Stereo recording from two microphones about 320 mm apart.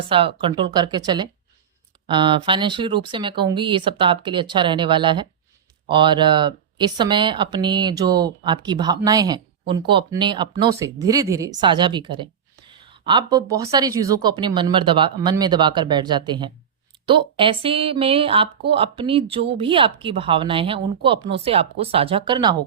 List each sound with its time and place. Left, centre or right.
0.1 s a woman's voice: centre